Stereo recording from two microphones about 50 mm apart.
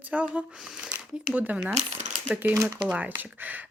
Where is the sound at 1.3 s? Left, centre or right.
Right.